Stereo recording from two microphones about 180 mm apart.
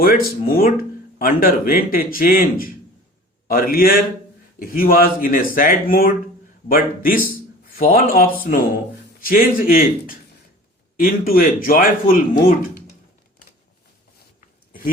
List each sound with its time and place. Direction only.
0.0 s a man's voice: 55° left (ahead or behind)